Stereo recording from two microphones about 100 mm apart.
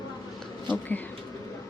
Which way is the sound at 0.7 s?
15° left (ahead or behind).